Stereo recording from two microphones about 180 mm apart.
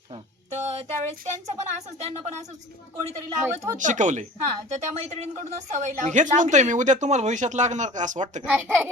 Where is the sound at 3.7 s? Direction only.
45° right (ahead or behind).